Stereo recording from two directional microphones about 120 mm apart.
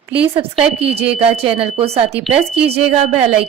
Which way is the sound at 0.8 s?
55° right (ahead or behind).